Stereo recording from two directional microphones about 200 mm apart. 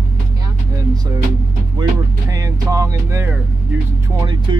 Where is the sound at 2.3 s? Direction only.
15° right (ahead or behind).